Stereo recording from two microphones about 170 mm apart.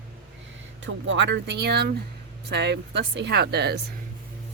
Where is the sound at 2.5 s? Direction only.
85° right.